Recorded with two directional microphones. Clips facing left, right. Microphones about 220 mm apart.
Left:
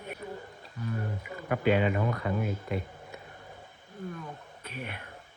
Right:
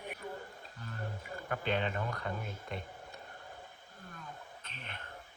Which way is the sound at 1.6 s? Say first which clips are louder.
Left 10 dB; 5° left (ahead or behind).